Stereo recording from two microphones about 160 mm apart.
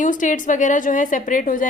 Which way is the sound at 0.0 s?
55° left (ahead or behind).